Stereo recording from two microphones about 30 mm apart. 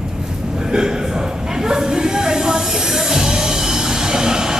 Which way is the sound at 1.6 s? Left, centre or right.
Centre.